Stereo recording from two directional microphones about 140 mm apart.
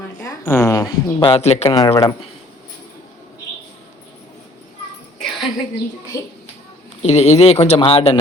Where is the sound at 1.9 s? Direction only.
20° left (ahead or behind).